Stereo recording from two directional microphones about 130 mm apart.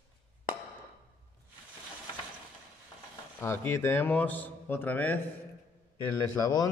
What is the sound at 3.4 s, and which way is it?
Speech, 20° left (ahead or behind).